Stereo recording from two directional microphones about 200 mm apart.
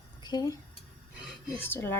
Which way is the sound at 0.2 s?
20° left (ahead or behind).